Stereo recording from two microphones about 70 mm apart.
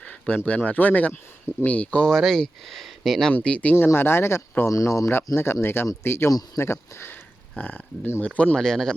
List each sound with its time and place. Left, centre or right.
0.0 s a sound: centre
0.3 s speech: centre
3.3 s speech: centre
3.8 s speech: left
4.7 s speech: left
5.0 s speech: left
7.6 s speech: left
8.5 s speech: centre